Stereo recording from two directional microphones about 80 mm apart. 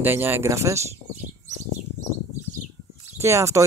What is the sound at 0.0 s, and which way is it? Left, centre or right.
Speech, right.